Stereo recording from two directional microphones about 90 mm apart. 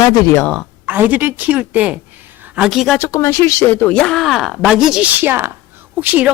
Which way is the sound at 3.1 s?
30° left (ahead or behind).